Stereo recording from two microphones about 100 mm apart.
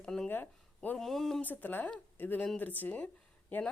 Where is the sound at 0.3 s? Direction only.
20° left (ahead or behind).